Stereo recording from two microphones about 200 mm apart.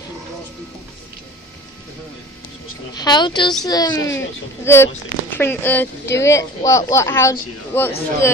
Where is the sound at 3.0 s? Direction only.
20° left (ahead or behind).